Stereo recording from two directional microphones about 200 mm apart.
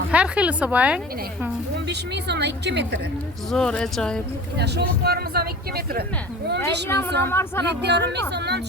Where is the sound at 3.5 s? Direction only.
5° left (ahead or behind).